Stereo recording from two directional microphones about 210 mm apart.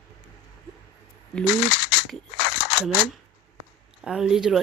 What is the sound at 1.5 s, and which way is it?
Speech, 55° left (ahead or behind).